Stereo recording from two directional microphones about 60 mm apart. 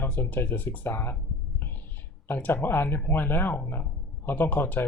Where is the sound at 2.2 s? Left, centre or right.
Left.